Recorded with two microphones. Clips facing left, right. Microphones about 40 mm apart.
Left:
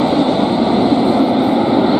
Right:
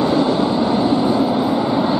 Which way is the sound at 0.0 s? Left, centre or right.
Left.